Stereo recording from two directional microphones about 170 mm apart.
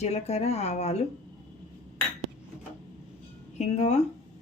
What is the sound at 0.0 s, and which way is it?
Speech, 40° left (ahead or behind).